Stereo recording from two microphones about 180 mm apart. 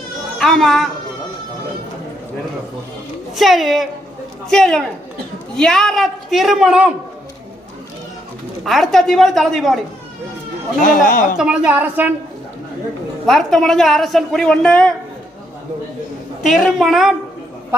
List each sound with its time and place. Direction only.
0.3 s speech: centre (ahead or behind)
3.3 s a woman's voice: centre (ahead or behind)
8.6 s a woman's voice: centre (ahead or behind)
10.8 s speech: 50° left (ahead or behind)
11.3 s a woman's voice: 5° right (ahead or behind)
13.2 s a woman's voice: centre (ahead or behind)
16.4 s a woman's voice: centre (ahead or behind)